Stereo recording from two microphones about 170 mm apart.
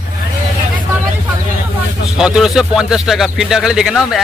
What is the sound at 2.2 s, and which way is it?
Speech, 5° right (ahead or behind).